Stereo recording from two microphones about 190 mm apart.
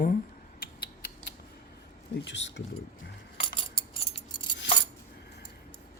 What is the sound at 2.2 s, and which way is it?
Speech, 70° left (ahead or behind).